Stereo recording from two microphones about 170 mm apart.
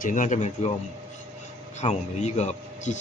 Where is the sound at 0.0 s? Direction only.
50° left (ahead or behind).